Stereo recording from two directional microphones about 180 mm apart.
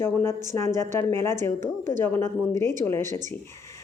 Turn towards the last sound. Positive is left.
turn(degrees=15)  # may be behind; listen again after turning